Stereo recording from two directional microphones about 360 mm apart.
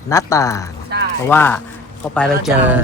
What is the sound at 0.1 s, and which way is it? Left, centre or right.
Speech, centre.